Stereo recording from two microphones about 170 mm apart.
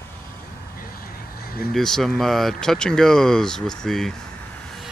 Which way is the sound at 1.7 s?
Centre (ahead or behind).